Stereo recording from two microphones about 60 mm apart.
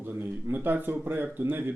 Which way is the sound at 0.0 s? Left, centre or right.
Right.